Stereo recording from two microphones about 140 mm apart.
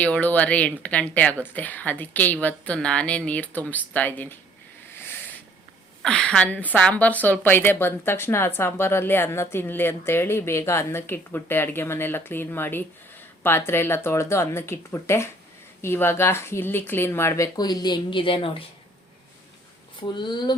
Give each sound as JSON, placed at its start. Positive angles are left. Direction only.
{"t": 0.0, "sound": "a woman's voice", "side_deg": 10}
{"t": 4.9, "sound": "a sound", "side_deg": 15}
{"t": 6.0, "sound": "a woman's voice", "side_deg": 5}
{"t": 20.0, "sound": "speech", "side_deg": 35}